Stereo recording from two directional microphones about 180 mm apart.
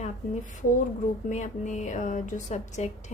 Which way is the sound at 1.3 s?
40° left (ahead or behind).